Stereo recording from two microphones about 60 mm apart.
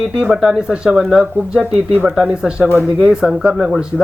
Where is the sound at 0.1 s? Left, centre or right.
Centre.